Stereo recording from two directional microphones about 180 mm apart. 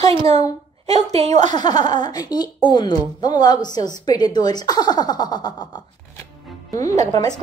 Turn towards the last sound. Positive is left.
turn(degrees=20)  # may be behind; listen again after turning